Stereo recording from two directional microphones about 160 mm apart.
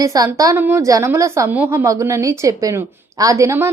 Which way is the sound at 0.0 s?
20° right (ahead or behind).